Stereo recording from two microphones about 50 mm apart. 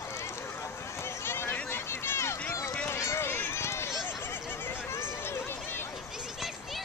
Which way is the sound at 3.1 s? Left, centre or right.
Left.